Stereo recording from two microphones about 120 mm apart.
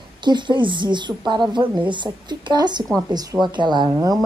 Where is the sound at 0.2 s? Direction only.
40° right (ahead or behind).